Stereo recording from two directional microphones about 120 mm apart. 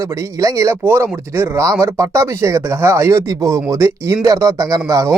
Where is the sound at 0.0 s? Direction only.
25° right (ahead or behind).